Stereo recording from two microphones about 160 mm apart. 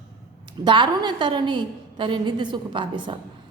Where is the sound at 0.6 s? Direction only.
30° right (ahead or behind).